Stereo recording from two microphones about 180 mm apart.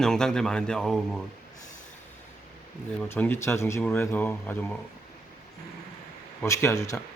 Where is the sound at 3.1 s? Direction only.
10° left (ahead or behind).